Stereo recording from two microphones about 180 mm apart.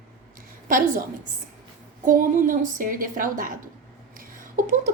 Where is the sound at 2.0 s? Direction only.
50° right (ahead or behind).